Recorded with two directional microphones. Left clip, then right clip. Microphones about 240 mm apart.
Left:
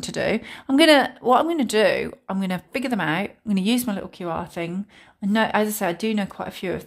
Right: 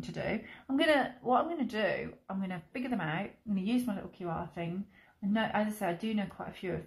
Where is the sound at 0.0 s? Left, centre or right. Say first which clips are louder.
Left 13 dB; left.